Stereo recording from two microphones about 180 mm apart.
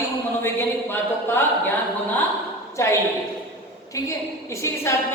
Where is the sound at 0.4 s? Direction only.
15° left (ahead or behind).